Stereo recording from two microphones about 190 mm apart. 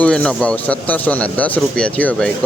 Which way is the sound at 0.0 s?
5° left (ahead or behind).